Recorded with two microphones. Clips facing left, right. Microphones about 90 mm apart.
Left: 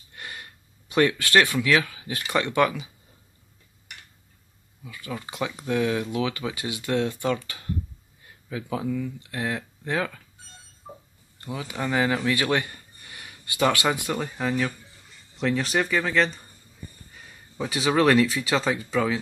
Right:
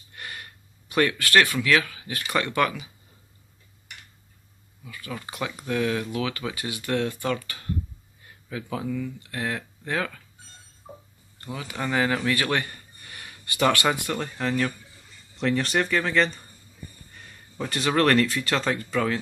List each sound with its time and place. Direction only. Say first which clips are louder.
0.1 s speech: even; 20° left (ahead or behind)
4.8 s speech: left 1 dB; 15° left (ahead or behind)
11.4 s speech: left 1 dB; 15° left (ahead or behind)